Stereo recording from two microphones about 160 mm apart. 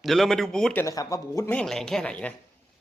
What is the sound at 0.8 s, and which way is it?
Speech, 20° left (ahead or behind).